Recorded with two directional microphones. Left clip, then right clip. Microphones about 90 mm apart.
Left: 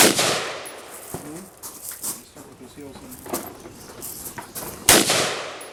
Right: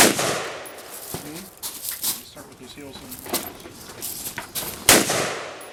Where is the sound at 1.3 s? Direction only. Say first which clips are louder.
Right 2 dB; 50° right (ahead or behind).